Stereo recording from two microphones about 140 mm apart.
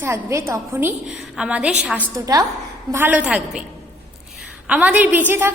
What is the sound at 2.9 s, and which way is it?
Speech, 10° right (ahead or behind).